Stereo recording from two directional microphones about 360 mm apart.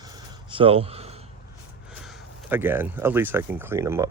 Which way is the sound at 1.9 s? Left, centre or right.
Centre.